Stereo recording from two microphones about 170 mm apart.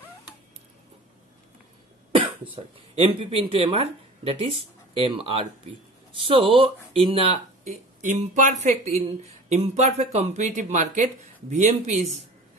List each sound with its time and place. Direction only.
2.5 s speech: 30° right (ahead or behind)